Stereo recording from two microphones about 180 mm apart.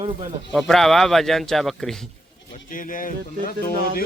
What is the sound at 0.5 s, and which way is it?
Speech, centre (ahead or behind).